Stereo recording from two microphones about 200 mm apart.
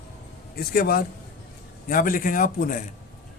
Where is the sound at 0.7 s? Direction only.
50° left (ahead or behind).